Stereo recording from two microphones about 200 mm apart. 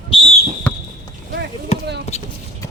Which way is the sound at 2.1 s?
30° left (ahead or behind).